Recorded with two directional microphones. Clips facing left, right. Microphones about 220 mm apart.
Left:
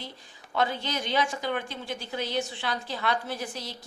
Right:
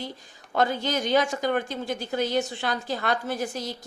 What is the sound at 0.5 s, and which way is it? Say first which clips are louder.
A woman's voice: right 4 dB; 45° right (ahead or behind).